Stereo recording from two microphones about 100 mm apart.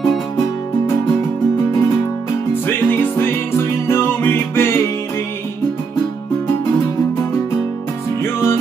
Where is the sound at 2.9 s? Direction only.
20° left (ahead or behind).